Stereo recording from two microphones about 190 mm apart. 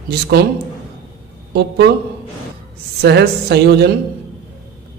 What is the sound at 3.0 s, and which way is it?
Speech, 60° right (ahead or behind).